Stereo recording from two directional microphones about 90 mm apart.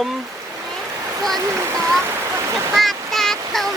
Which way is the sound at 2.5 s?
Centre (ahead or behind).